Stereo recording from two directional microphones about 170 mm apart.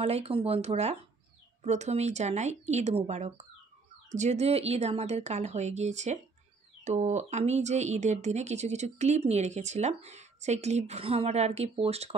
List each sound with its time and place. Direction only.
0.0 s speech: 35° right (ahead or behind)